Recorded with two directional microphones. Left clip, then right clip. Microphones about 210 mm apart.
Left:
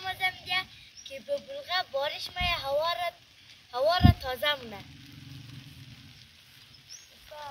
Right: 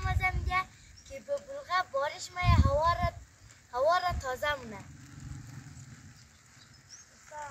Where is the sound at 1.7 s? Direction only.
10° left (ahead or behind).